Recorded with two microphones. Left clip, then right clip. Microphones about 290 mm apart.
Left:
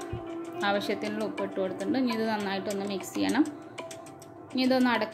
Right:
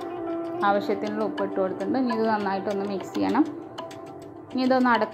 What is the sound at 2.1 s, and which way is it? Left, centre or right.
Speech, centre.